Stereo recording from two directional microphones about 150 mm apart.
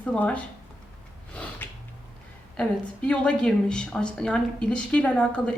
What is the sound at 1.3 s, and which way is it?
Snort, 10° left (ahead or behind).